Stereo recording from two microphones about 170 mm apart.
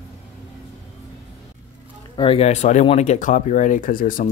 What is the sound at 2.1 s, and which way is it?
Speech, 35° left (ahead or behind).